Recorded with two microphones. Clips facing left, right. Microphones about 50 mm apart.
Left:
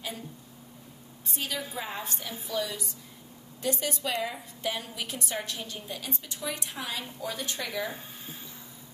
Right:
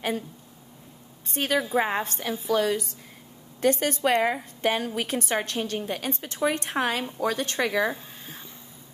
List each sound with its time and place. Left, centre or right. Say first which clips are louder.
1.3 s a woman's voice: right 10 dB; right